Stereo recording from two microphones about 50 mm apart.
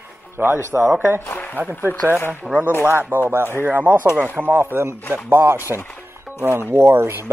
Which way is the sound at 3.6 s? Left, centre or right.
Right.